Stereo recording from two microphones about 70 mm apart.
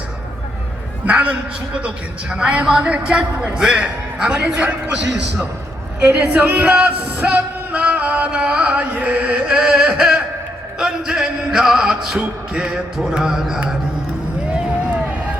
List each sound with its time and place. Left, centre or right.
1.0 s a man's voice: centre
6.0 s music: centre